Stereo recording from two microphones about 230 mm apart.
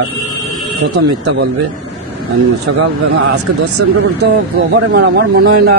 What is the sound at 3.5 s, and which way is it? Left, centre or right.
Speech, right.